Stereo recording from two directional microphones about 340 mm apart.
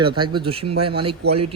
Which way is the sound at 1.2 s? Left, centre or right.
Right.